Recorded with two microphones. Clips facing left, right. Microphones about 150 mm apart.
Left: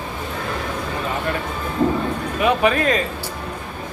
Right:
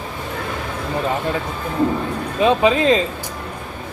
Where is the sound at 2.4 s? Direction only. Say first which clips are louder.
Right 3 dB; 20° right (ahead or behind).